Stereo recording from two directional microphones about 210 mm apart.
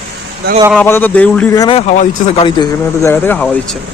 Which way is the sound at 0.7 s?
10° left (ahead or behind).